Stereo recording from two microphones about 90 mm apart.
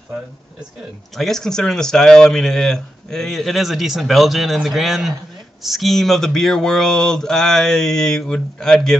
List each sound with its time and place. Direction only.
1.1 s speech: 5° left (ahead or behind)